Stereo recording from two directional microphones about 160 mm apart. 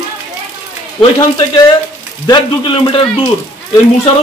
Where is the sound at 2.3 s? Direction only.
30° left (ahead or behind).